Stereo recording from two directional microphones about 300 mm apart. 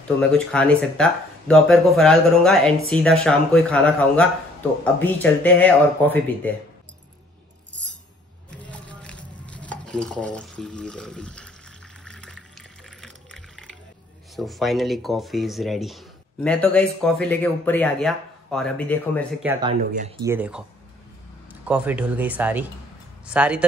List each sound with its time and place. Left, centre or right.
0.3 s speech: centre
8.5 s stir: centre
12.0 s water: centre
14.3 s speech: centre
19.4 s speech: centre
20.2 s speech: centre